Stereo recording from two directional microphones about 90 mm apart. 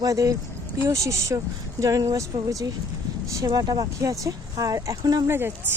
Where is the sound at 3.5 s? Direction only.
50° right (ahead or behind).